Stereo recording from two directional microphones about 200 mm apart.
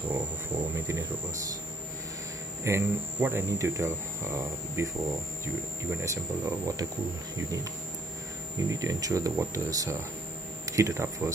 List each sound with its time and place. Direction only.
0.7 s speech: 15° right (ahead or behind)
2.6 s speech: 10° right (ahead or behind)
5.9 s speech: 15° right (ahead or behind)
8.6 s speech: 15° right (ahead or behind)